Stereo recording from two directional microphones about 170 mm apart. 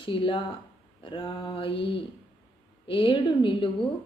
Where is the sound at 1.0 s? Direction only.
30° left (ahead or behind).